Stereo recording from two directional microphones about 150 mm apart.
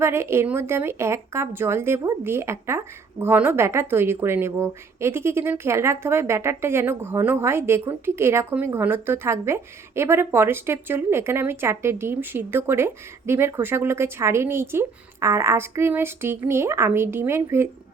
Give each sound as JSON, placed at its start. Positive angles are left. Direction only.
{"t": 0.0, "sound": "a woman's voice", "side_deg": -15}